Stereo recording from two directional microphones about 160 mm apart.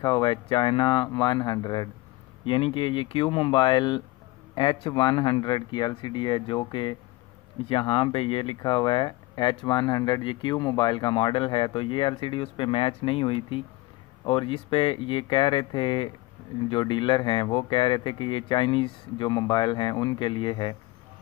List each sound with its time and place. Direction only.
0.0 s speech: 30° left (ahead or behind)